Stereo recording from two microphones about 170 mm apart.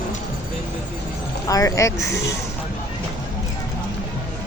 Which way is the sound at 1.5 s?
20° left (ahead or behind).